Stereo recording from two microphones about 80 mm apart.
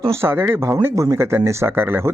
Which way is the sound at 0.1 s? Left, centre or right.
Right.